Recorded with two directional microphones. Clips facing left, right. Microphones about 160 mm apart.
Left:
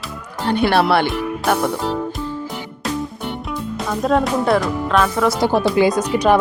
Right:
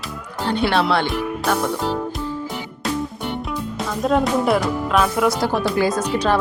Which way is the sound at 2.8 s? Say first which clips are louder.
Even; centre (ahead or behind).